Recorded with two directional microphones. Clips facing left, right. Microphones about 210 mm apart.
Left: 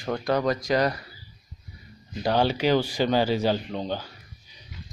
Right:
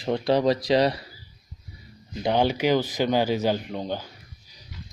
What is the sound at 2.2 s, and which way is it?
Speech, 15° right (ahead or behind).